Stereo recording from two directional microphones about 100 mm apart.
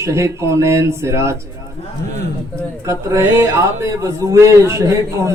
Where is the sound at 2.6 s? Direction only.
30° right (ahead or behind).